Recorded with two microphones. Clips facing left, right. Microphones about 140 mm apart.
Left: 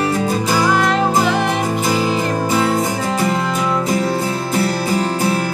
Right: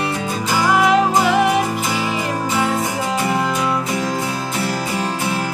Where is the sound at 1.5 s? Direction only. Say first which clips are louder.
Left 1 dB; 40° left (ahead or behind).